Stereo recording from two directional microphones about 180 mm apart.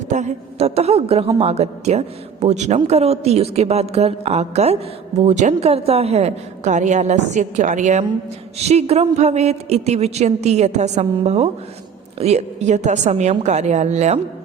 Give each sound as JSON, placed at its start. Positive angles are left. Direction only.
{"t": 0.1, "sound": "a man's voice", "side_deg": -40}